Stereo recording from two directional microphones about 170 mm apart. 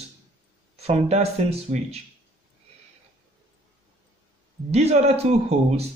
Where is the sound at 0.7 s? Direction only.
40° right (ahead or behind).